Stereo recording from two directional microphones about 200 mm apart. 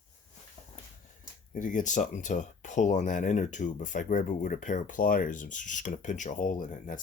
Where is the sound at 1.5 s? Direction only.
40° left (ahead or behind).